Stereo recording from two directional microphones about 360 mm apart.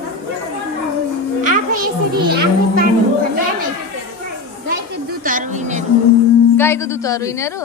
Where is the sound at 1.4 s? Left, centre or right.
Right.